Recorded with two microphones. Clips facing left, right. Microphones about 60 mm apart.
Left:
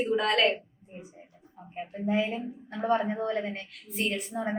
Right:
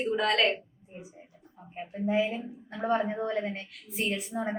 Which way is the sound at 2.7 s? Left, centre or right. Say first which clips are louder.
Left 1 dB; left.